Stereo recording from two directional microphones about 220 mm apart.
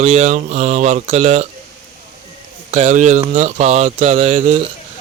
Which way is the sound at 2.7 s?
30° right (ahead or behind).